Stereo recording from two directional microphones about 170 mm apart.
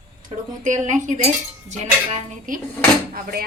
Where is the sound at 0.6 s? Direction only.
45° right (ahead or behind).